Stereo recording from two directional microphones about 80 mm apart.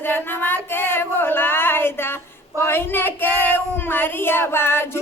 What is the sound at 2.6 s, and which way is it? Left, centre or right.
Speech, left.